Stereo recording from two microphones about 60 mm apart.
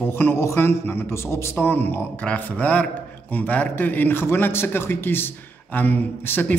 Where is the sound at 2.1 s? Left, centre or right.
Left.